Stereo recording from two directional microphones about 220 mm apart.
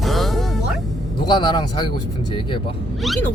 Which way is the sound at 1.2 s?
20° left (ahead or behind).